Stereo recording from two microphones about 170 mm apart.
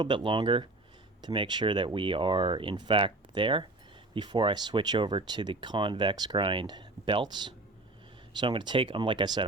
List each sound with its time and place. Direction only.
0.0 s speech: 25° right (ahead or behind)